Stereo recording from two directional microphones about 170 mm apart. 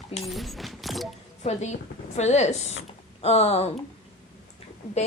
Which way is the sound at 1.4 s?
45° left (ahead or behind).